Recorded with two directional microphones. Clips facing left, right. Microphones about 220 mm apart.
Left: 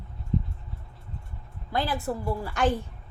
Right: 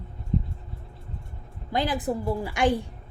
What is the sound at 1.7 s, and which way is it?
A woman's voice, 20° right (ahead or behind).